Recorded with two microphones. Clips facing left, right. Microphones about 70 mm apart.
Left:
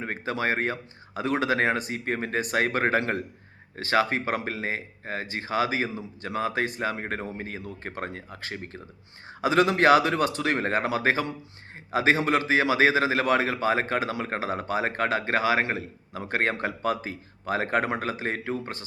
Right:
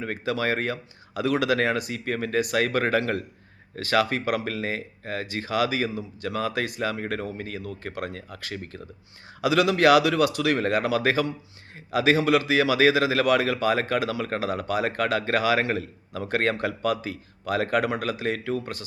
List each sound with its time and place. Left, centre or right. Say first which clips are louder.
0.0 s a man's voice: right 2 dB; left